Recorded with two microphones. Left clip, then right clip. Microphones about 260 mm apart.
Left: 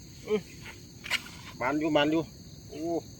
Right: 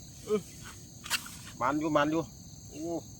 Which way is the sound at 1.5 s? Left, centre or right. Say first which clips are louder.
Left 1 dB; right.